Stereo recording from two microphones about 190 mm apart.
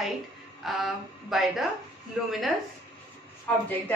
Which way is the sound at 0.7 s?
Centre (ahead or behind).